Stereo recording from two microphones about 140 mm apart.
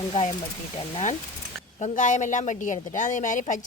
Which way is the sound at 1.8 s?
60° left (ahead or behind).